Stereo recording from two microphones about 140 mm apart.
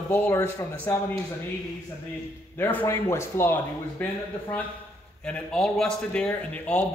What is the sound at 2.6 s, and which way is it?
A man's voice, 15° left (ahead or behind).